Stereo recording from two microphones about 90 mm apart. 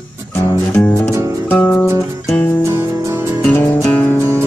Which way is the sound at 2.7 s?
30° right (ahead or behind).